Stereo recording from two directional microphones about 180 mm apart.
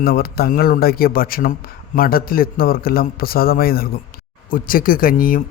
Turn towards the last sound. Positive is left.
turn(degrees=50)  # may be behind; listen again after turning